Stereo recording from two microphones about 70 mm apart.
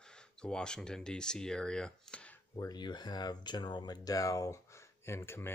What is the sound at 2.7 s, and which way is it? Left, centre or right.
Speech, left.